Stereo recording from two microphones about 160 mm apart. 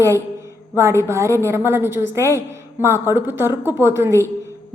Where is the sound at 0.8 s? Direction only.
15° right (ahead or behind).